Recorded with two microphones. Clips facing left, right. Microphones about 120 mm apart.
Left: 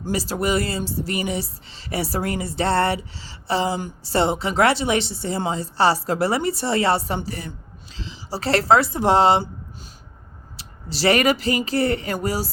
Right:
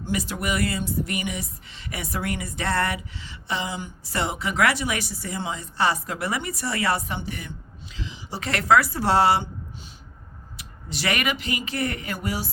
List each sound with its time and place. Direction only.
0.0 s a woman's voice: 35° left (ahead or behind)
10.6 s speech: 30° left (ahead or behind)